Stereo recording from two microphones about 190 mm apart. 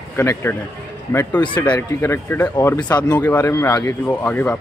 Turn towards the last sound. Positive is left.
turn(degrees=5)  # may be behind; listen again after turning